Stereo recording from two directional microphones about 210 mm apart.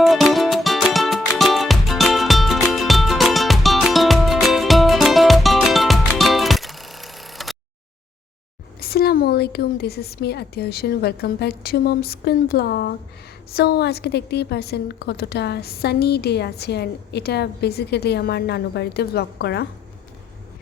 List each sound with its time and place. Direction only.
0.0 s music: centre (ahead or behind)
8.8 s a woman's voice: 45° left (ahead or behind)